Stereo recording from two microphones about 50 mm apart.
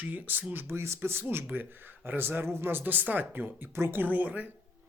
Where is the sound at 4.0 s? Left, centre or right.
Right.